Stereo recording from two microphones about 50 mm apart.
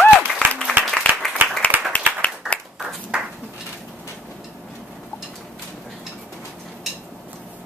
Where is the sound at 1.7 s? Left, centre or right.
Right.